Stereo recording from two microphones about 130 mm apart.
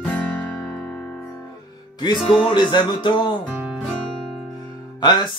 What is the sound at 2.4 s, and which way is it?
Music, 35° left (ahead or behind).